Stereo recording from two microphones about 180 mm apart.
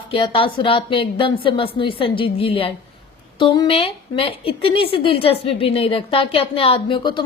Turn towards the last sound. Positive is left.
turn(degrees=25)  # may be behind; listen again after turning